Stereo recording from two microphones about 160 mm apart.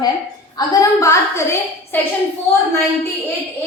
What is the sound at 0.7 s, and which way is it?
Speech, 20° left (ahead or behind).